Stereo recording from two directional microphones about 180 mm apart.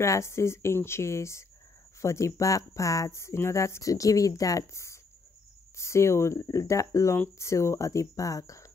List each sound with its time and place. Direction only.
0.0 s speech: 15° left (ahead or behind)